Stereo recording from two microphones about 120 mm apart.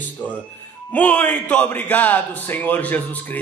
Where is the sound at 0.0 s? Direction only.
10° left (ahead or behind).